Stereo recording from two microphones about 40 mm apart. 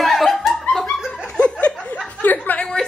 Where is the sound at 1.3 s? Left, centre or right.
Left.